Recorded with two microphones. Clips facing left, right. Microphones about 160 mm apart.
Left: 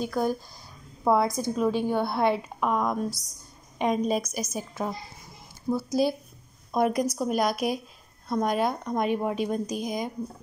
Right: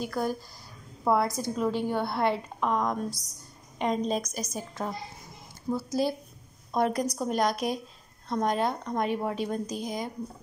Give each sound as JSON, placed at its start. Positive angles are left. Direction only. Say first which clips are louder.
{"t": 0.0, "sound": "a woman's voice", "louder": "left 3 dB", "side_deg": 15}